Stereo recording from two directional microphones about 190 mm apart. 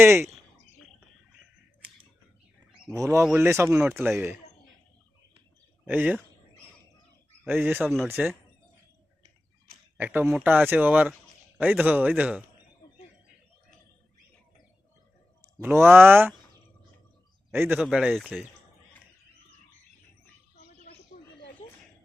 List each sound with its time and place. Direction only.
0.0 s speech: 15° right (ahead or behind)
2.9 s speech: 15° right (ahead or behind)
5.8 s speech: 10° right (ahead or behind)
7.4 s speech: 10° right (ahead or behind)
10.0 s speech: 10° right (ahead or behind)
15.6 s speech: 10° right (ahead or behind)
17.5 s speech: 10° right (ahead or behind)